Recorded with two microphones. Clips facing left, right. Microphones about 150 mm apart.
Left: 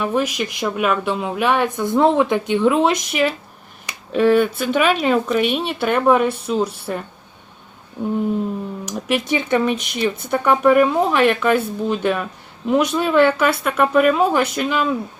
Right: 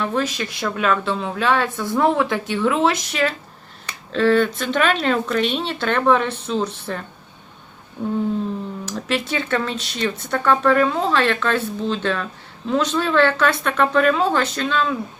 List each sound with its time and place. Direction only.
0.0 s speech: 10° left (ahead or behind)
8.8 s speech: 15° left (ahead or behind)